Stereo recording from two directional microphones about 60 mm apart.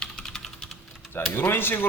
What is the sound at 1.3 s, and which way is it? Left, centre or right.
Speech, left.